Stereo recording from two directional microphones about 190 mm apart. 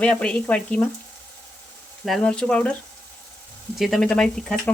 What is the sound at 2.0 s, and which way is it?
Speech, 5° left (ahead or behind).